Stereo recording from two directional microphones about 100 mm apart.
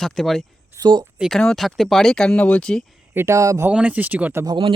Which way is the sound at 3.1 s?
30° right (ahead or behind).